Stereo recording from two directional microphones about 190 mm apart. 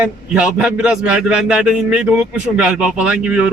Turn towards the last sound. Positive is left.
turn(degrees=-5)  # may be behind; listen again after turning